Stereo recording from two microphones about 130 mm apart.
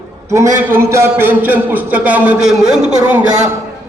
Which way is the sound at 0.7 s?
20° right (ahead or behind).